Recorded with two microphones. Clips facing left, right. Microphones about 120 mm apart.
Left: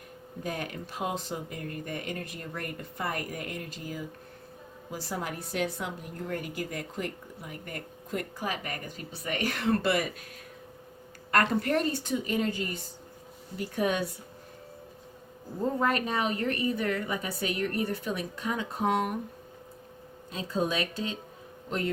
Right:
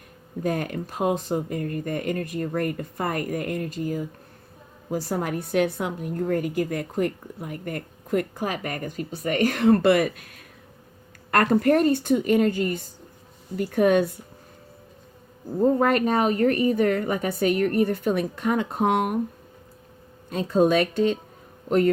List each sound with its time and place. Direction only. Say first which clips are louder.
0.4 s a woman's voice: right 9 dB; 50° right (ahead or behind)
11.3 s a woman's voice: right 7 dB; 50° right (ahead or behind)
15.8 s a woman's voice: right 7 dB; 55° right (ahead or behind)
20.3 s speech: right 10 dB; 55° right (ahead or behind)